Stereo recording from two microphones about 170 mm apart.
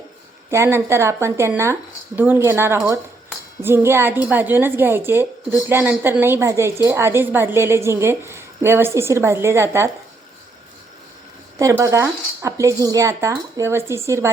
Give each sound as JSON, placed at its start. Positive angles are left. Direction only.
{"t": 0.5, "sound": "a woman's voice", "side_deg": -15}
{"t": 11.8, "sound": "a woman's voice", "side_deg": -15}